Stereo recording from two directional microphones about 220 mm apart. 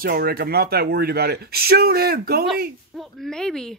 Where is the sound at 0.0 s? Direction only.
45° right (ahead or behind).